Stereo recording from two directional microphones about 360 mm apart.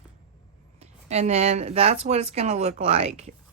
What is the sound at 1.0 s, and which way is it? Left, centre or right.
Speech, centre.